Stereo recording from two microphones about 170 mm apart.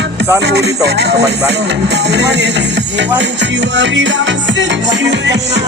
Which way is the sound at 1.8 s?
90° right.